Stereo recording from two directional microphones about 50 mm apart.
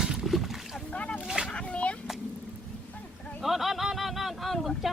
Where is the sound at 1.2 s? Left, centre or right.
Centre.